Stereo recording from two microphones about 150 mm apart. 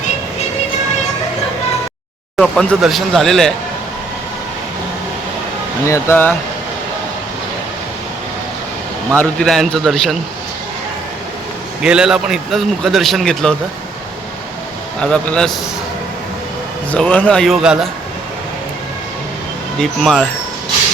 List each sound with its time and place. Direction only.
2.3 s speech: 5° left (ahead or behind)
5.9 s speech: 15° left (ahead or behind)
9.1 s speech: centre (ahead or behind)
11.8 s speech: 5° right (ahead or behind)
15.0 s speech: 5° left (ahead or behind)
16.9 s speech: 10° left (ahead or behind)
19.8 s speech: centre (ahead or behind)